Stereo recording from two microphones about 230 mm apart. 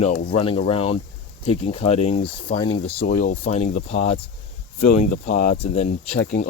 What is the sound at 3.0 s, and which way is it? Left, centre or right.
Speech, left.